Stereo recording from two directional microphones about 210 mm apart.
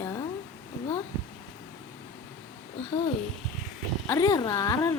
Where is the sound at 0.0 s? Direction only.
15° left (ahead or behind).